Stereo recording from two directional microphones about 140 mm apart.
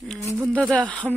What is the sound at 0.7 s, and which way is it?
Speech, 10° left (ahead or behind).